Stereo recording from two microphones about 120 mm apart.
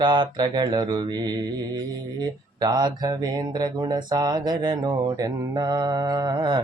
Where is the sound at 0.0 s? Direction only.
40° right (ahead or behind).